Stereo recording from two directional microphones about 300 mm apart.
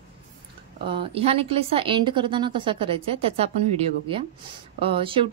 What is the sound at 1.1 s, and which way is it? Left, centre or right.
Speech, centre.